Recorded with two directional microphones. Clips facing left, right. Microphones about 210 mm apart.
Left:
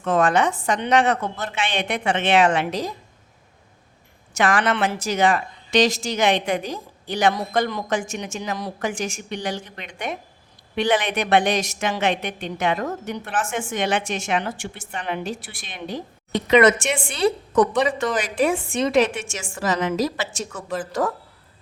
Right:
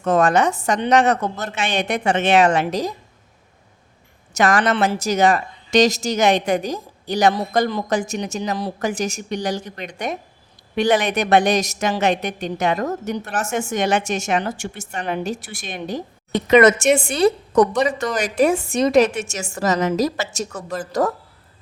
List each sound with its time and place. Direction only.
0.0 s a woman's voice: 40° right (ahead or behind)
4.4 s a woman's voice: 40° right (ahead or behind)